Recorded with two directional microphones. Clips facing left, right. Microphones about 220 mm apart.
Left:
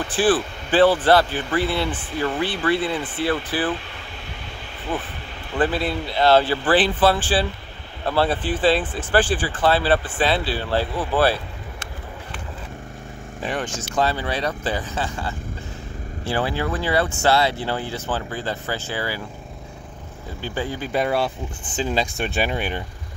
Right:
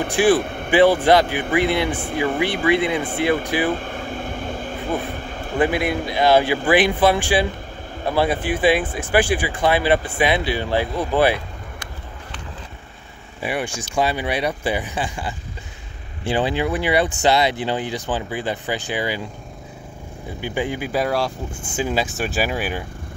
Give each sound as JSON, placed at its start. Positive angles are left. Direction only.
{"t": 0.4, "sound": "a sound", "side_deg": -55}
{"t": 0.7, "sound": "speech", "side_deg": -15}
{"t": 3.7, "sound": "a sound", "side_deg": -50}
{"t": 5.6, "sound": "speech", "side_deg": -15}
{"t": 13.4, "sound": "speech", "side_deg": -10}
{"t": 20.3, "sound": "speech", "side_deg": -15}
{"t": 20.9, "sound": "speech", "side_deg": 0}